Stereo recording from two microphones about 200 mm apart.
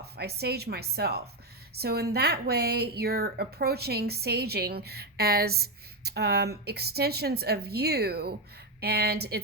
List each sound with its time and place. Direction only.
0.0 s a woman's voice: 55° right (ahead or behind)